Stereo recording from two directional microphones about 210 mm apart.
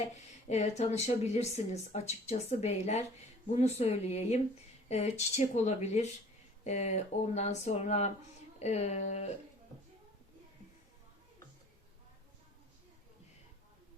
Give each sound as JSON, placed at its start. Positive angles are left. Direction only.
{"t": 0.0, "sound": "speech", "side_deg": 30}